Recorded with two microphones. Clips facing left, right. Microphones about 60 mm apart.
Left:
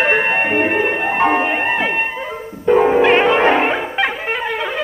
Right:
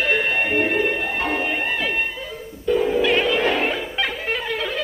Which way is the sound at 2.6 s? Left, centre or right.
Left.